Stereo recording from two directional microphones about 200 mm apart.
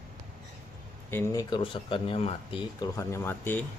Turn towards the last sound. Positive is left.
turn(degrees=10)  # may be behind; listen again after turning